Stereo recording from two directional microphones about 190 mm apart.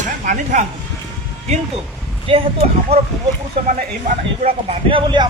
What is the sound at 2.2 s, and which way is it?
Speech, 30° right (ahead or behind).